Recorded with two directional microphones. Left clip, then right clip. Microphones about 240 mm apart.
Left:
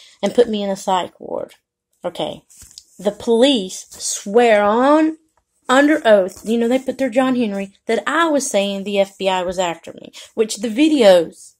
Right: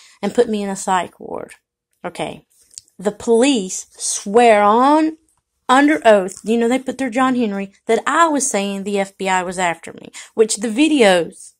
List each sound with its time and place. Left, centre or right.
0.0 s a woman's voice: centre
1.1 s speech: right